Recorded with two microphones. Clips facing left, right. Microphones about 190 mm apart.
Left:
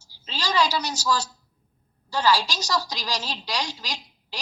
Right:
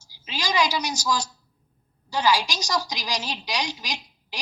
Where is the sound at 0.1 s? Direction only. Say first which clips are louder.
Even; 15° right (ahead or behind).